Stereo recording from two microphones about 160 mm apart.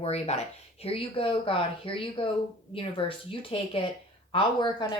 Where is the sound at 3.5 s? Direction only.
35° left (ahead or behind).